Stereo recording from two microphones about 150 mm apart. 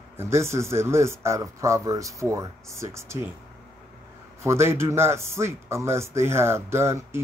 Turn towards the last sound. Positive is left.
turn(degrees=-15)  # may be behind; listen again after turning